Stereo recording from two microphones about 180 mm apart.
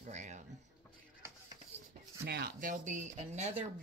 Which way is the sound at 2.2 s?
65° right (ahead or behind).